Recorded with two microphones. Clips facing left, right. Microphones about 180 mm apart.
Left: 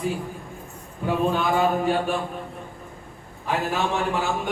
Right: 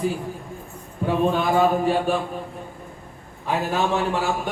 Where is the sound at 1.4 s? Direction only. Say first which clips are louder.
Right 2 dB; centre (ahead or behind).